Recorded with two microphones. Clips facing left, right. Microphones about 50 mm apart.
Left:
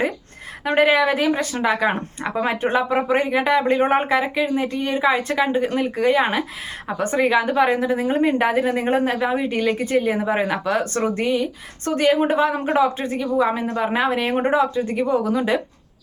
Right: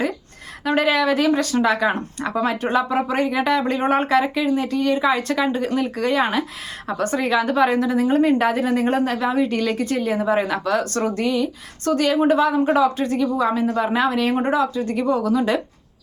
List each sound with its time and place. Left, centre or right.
0.6 s a woman's voice: left